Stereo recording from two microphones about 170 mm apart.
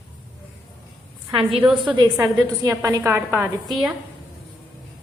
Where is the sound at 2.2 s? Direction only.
20° right (ahead or behind).